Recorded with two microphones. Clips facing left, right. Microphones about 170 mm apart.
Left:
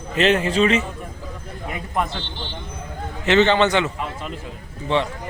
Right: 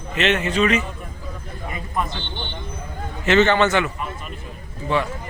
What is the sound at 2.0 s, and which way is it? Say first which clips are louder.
Speech: left 2 dB; 70° left (ahead or behind).